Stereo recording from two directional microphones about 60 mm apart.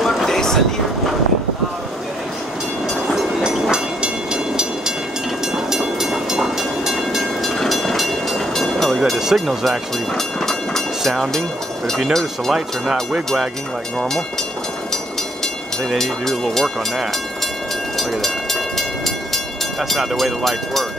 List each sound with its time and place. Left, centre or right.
0.0 s vehicle: centre
3.1 s train: centre
12.1 s speech: centre
13.9 s speech: centre
16.0 s speech: centre
17.9 s train: centre
20.2 s speech: centre